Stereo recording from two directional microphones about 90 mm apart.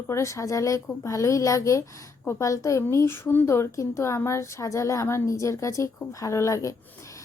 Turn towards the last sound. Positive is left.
turn(degrees=35)  # may be behind; listen again after turning